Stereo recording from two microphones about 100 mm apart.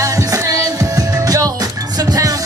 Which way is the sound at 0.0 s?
35° right (ahead or behind).